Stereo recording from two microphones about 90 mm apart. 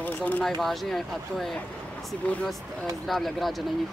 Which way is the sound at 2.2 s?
15° left (ahead or behind).